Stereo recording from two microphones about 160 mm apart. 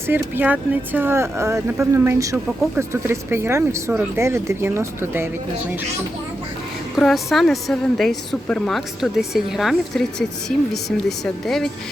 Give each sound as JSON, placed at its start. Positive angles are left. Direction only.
{"t": 0.1, "sound": "speech", "side_deg": -10}
{"t": 6.9, "sound": "a woman's voice", "side_deg": 0}
{"t": 11.4, "sound": "a woman's voice", "side_deg": 0}